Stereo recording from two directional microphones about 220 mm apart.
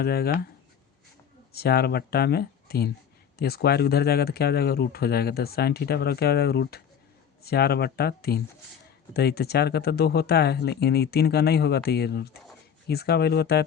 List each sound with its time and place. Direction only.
0.0 s speech: 45° left (ahead or behind)
1.5 s speech: 45° left (ahead or behind)